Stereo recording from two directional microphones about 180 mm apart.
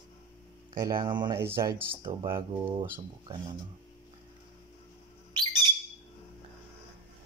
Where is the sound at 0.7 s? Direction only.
25° right (ahead or behind).